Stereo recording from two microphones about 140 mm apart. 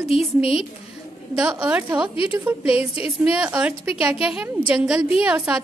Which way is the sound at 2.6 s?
45° left (ahead or behind).